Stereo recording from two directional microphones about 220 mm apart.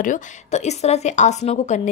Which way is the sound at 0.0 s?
35° left (ahead or behind).